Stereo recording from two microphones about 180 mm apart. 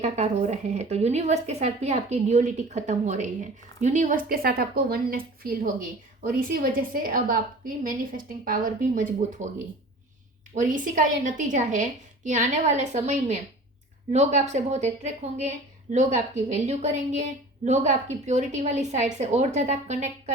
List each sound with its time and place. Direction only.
0.0 s a woman's voice: 40° right (ahead or behind)
10.5 s a woman's voice: 45° right (ahead or behind)